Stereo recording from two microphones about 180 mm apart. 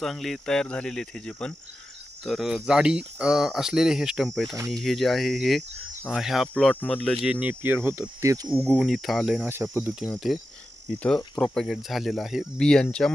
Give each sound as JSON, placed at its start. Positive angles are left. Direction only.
{"t": 0.0, "sound": "speech", "side_deg": 0}
{"t": 7.2, "sound": "speech", "side_deg": -10}
{"t": 8.7, "sound": "speech", "side_deg": 0}